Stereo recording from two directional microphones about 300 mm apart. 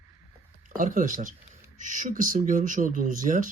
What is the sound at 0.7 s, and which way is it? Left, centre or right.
Speech, right.